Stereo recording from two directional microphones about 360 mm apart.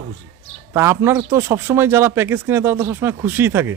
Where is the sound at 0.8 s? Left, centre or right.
Centre.